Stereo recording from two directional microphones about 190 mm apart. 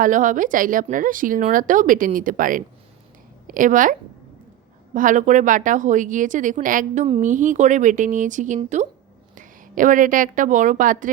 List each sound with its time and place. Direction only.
0.0 s a woman's voice: 45° right (ahead or behind)
4.9 s a woman's voice: 40° right (ahead or behind)